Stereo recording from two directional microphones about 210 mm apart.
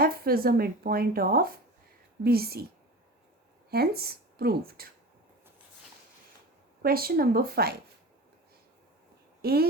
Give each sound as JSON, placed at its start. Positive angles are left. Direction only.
{"t": 0.0, "sound": "speech", "side_deg": -45}
{"t": 3.7, "sound": "speech", "side_deg": -45}
{"t": 6.8, "sound": "speech", "side_deg": -45}
{"t": 9.4, "sound": "speech", "side_deg": -50}